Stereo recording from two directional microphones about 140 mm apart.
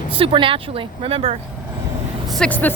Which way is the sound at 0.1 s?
40° right (ahead or behind).